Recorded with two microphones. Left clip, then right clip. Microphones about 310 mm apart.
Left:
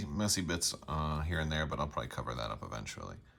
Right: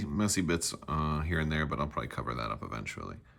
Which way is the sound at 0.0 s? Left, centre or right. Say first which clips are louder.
Right 3 dB; centre.